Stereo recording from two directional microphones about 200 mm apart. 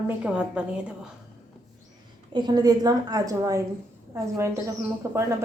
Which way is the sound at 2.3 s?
20° right (ahead or behind).